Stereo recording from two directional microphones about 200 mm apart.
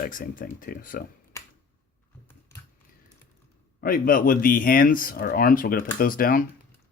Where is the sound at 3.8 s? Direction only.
45° left (ahead or behind).